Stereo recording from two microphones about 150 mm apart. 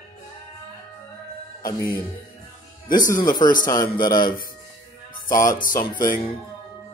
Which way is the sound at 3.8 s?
80° left.